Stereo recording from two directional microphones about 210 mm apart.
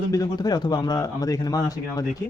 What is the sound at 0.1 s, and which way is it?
Speech, 15° left (ahead or behind).